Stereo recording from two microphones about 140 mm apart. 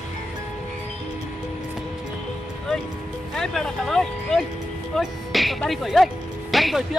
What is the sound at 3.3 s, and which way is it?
Speech, 5° left (ahead or behind).